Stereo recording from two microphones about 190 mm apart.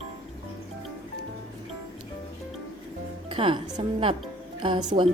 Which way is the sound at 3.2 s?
25° right (ahead or behind).